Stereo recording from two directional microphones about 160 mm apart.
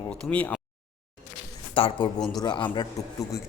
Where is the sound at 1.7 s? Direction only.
30° left (ahead or behind).